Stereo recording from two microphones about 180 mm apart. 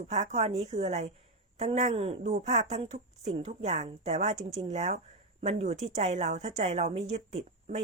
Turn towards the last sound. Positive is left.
turn(degrees=-40)  # may be behind; listen again after turning